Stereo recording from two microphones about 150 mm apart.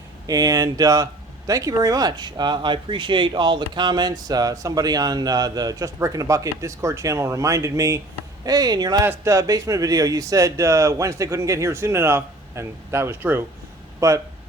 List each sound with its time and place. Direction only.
0.3 s speech: 25° right (ahead or behind)